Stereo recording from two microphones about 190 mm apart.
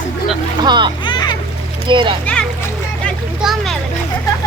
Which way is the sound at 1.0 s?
25° left (ahead or behind).